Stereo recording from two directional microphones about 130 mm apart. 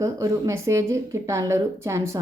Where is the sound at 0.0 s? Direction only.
25° right (ahead or behind).